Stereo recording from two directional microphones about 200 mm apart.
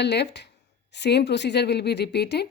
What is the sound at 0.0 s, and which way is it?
Speech, 55° left (ahead or behind).